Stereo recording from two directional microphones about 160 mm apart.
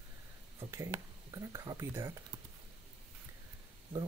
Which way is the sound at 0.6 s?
15° right (ahead or behind).